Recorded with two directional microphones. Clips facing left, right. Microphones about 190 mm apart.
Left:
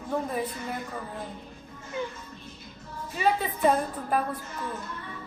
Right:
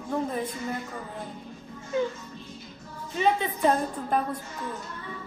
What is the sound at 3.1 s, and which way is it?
Speech, 5° left (ahead or behind).